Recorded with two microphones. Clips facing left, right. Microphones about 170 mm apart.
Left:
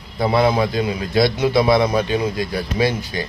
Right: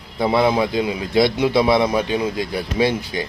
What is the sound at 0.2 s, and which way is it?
Speech, 20° right (ahead or behind).